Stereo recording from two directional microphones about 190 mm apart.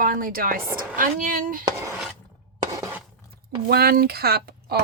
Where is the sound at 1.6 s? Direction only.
15° right (ahead or behind).